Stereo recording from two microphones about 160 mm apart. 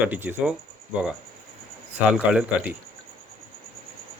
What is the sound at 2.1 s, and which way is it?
Speech, 5° right (ahead or behind).